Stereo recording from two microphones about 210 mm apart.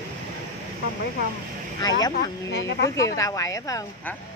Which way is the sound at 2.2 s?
55° left (ahead or behind).